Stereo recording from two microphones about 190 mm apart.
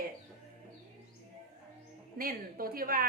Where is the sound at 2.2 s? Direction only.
50° right (ahead or behind).